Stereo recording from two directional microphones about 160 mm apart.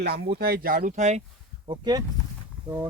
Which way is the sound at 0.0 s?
90° right.